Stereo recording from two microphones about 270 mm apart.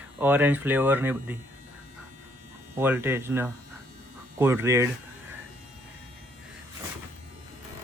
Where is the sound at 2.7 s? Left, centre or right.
Centre.